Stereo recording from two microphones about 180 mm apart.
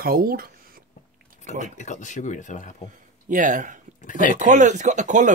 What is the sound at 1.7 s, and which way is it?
Speech, 40° left (ahead or behind).